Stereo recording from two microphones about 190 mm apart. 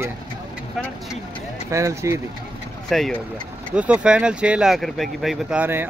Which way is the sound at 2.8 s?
Centre (ahead or behind).